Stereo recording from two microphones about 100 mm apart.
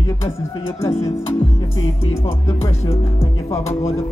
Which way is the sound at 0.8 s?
30° left (ahead or behind).